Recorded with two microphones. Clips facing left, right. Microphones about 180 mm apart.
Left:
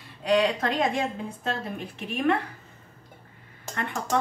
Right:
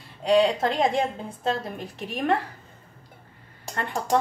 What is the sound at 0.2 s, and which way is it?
A woman's voice, 30° right (ahead or behind).